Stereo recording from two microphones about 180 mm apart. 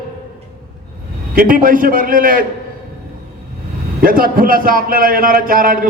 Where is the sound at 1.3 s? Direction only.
50° right (ahead or behind).